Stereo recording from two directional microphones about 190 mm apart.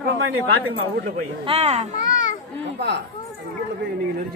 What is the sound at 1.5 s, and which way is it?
Speech, 35° right (ahead or behind).